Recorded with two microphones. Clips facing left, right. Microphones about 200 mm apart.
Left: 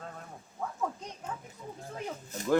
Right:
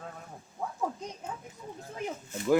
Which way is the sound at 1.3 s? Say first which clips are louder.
Left 4 dB; 10° right (ahead or behind).